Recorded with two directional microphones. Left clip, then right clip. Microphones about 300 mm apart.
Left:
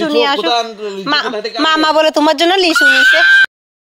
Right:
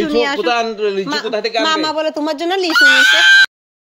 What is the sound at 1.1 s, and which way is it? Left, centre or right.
Speech, centre.